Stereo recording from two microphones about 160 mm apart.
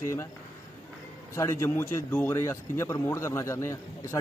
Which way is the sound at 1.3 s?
20° left (ahead or behind).